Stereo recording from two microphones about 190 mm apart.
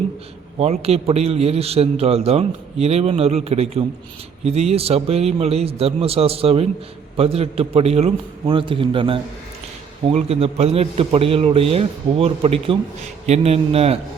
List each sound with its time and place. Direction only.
0.6 s a man's voice: 35° right (ahead or behind)